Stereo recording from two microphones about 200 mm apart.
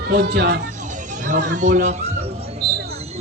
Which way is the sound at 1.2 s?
40° right (ahead or behind).